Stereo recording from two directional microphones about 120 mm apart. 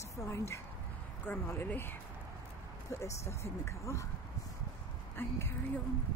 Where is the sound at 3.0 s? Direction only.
25° left (ahead or behind).